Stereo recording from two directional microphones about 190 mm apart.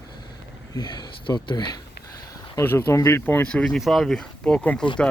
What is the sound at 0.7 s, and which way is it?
Speech, 20° left (ahead or behind).